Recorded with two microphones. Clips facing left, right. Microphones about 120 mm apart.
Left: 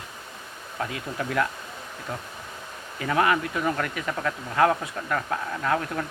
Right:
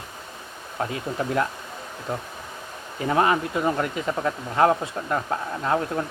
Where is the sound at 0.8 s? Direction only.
30° right (ahead or behind).